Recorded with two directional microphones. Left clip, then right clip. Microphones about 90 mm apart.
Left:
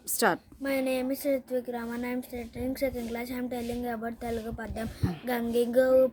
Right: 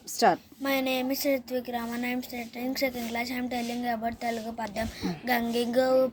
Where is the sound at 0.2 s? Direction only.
35° left (ahead or behind).